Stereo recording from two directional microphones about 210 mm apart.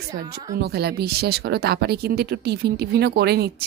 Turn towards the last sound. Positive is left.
turn(degrees=-50)  # may be behind; listen again after turning